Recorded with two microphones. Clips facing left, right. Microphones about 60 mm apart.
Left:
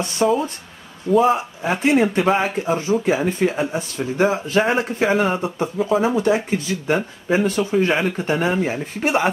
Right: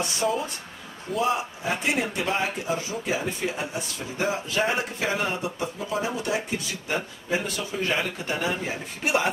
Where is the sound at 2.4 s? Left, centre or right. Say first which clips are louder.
Left 7 dB; left.